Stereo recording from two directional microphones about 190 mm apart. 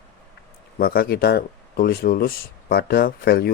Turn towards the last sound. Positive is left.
turn(degrees=55)  # may be behind; listen again after turning